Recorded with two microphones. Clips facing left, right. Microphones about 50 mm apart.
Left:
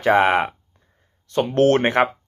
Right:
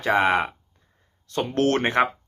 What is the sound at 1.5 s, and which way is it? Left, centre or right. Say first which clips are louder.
Speech: left 5 dB; left.